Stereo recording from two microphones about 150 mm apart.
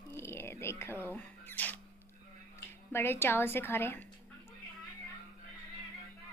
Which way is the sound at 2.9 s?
15° left (ahead or behind).